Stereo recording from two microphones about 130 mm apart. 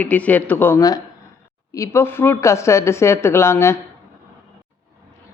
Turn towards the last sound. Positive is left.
turn(degrees=20)  # may be behind; listen again after turning